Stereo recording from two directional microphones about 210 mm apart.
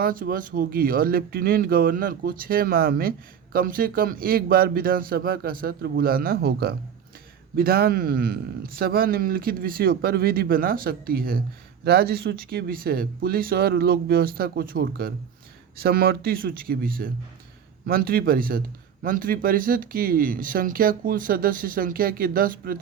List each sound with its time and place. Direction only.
0.0 s speech: 40° right (ahead or behind)